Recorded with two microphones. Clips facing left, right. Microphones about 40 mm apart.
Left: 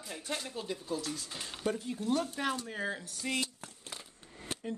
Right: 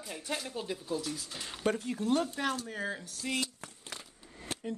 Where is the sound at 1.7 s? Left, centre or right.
Right.